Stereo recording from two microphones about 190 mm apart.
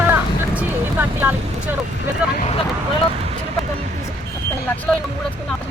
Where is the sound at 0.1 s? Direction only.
10° right (ahead or behind).